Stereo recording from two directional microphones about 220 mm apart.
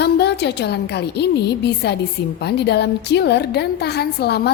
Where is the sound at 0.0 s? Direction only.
50° left (ahead or behind).